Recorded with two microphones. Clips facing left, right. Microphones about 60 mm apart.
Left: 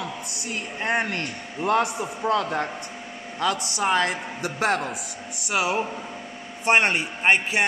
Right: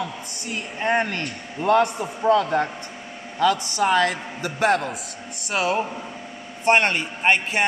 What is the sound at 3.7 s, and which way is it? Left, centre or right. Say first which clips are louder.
Speech: right 3 dB; centre.